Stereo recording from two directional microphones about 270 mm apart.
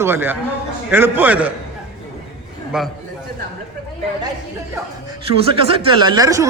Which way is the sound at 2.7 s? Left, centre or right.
Centre.